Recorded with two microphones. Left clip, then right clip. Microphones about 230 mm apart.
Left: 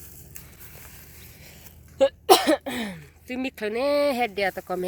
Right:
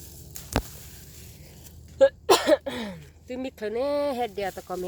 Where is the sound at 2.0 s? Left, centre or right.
Left.